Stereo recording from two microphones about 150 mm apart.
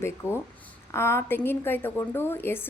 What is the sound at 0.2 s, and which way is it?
Speech, 10° right (ahead or behind).